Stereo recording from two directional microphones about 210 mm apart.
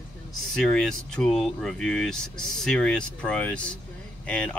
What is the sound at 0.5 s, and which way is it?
Speech, 5° left (ahead or behind).